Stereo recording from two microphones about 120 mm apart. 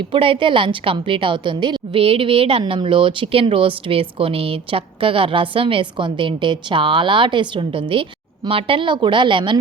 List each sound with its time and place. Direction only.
0.1 s a woman's voice: 45° right (ahead or behind)